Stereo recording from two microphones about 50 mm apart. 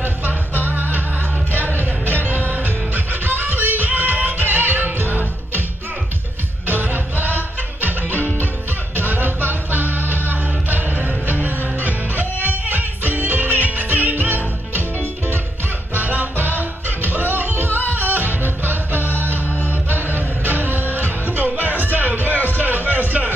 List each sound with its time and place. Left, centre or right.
0.7 s music: right
6.7 s music: right
15.9 s music: right